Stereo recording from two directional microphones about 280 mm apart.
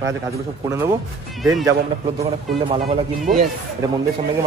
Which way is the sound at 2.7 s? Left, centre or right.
Right.